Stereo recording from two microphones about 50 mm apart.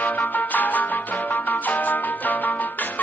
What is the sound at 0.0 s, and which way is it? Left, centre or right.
Music, left.